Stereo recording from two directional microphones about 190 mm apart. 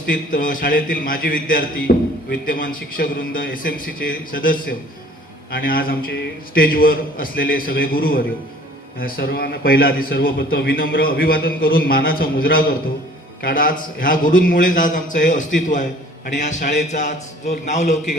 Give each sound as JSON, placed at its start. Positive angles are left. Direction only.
{"t": 0.1, "sound": "a man's voice", "side_deg": 45}